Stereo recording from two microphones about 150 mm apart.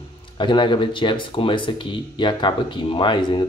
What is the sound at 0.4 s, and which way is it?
Speech, 30° left (ahead or behind).